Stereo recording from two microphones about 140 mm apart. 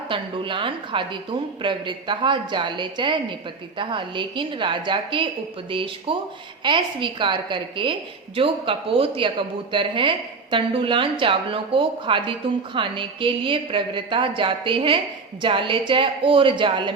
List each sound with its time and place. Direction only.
0.1 s a woman's voice: 35° right (ahead or behind)